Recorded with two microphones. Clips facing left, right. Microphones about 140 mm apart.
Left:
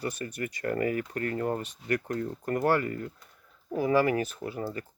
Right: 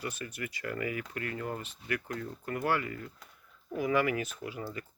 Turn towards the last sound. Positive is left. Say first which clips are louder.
# left 5 dB
turn(degrees=40)  # may be behind; listen again after turning